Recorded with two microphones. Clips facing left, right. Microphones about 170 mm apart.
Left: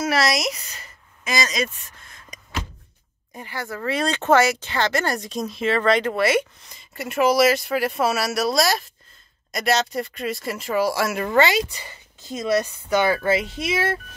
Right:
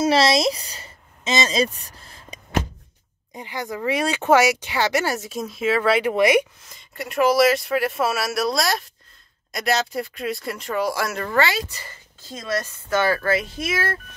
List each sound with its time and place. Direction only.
0.0 s a sound: 25° right (ahead or behind)
3.3 s speech: 15° right (ahead or behind)
6.7 s speech: centre (ahead or behind)
11.1 s speech: 20° left (ahead or behind)